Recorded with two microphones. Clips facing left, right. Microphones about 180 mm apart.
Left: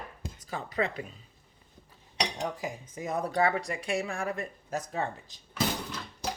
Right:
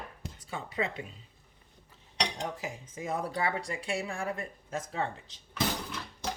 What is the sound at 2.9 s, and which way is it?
Speech, 30° right (ahead or behind).